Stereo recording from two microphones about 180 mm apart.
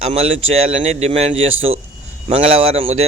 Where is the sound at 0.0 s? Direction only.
35° right (ahead or behind).